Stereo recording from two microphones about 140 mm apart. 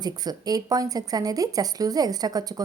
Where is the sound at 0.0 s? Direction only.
30° right (ahead or behind).